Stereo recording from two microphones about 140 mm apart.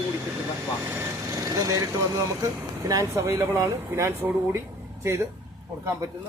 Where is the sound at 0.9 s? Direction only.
20° right (ahead or behind).